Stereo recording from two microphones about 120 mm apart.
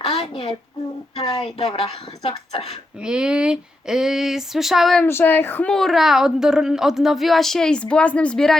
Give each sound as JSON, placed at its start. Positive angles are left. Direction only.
{"t": 0.0, "sound": "a sound", "side_deg": 55}
{"t": 1.1, "sound": "a woman's voice", "side_deg": 50}
{"t": 3.0, "sound": "a woman's voice", "side_deg": -5}
{"t": 5.0, "sound": "speech", "side_deg": 15}
{"t": 5.7, "sound": "a woman's voice", "side_deg": 0}